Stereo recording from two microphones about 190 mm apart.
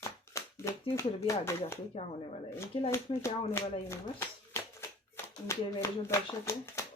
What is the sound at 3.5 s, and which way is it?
Speech, 15° left (ahead or behind).